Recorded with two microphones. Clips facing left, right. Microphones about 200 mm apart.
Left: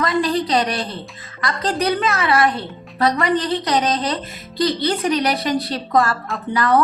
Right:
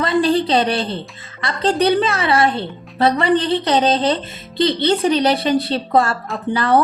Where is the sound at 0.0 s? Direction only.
30° right (ahead or behind).